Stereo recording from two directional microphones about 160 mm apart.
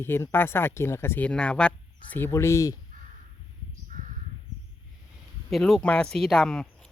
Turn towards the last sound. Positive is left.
turn(degrees=5)  # may be behind; listen again after turning